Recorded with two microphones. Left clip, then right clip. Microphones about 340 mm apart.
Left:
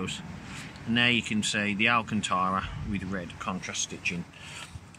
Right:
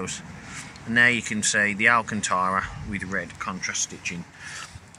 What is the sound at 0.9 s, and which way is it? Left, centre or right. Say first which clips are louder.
Speech: right 6 dB; centre.